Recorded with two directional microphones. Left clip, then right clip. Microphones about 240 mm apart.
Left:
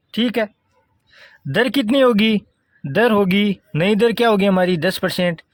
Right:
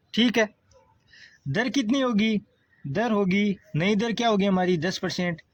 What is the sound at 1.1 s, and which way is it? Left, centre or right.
Speech, left.